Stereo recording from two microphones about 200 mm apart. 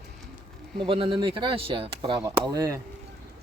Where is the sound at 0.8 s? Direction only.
25° right (ahead or behind).